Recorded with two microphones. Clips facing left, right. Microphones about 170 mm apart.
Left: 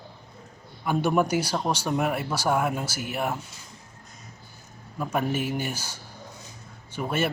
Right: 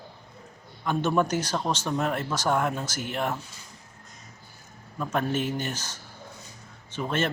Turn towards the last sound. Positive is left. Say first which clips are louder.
# left 1 dB
turn(degrees=10)  # may be behind; listen again after turning